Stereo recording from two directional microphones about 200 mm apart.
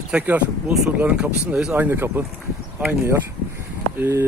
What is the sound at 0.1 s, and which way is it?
Speech, 5° right (ahead or behind).